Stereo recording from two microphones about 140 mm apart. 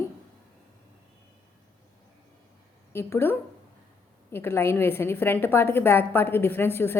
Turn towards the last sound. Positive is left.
turn(degrees=15)  # may be behind; listen again after turning